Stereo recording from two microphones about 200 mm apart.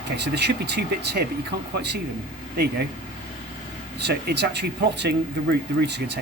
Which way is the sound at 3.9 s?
55° right (ahead or behind).